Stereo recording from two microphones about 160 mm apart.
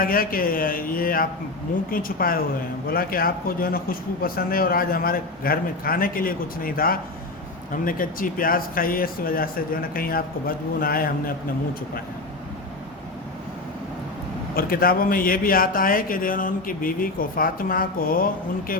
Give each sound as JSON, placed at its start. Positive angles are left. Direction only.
{"t": 0.0, "sound": "speech", "side_deg": 65}
{"t": 14.5, "sound": "speech", "side_deg": 65}